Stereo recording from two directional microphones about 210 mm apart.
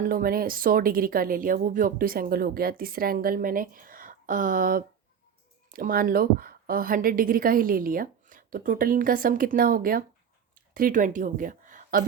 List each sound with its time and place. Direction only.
0.0 s a woman's voice: 45° right (ahead or behind)